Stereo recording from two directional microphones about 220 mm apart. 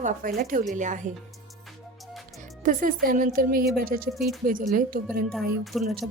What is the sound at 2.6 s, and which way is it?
A woman's voice, 40° right (ahead or behind).